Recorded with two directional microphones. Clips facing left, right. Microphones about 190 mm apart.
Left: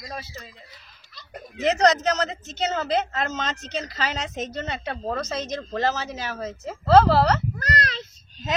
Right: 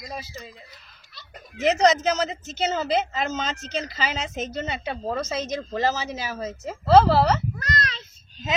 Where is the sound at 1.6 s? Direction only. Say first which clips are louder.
Even; centre (ahead or behind).